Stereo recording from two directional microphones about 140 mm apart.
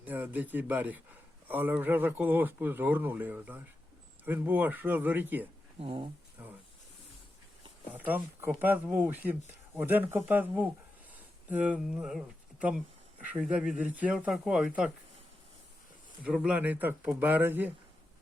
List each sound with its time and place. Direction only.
0.0 s speech: 10° right (ahead or behind)
5.8 s speech: 40° right (ahead or behind)
7.9 s speech: 10° right (ahead or behind)
16.2 s speech: 5° right (ahead or behind)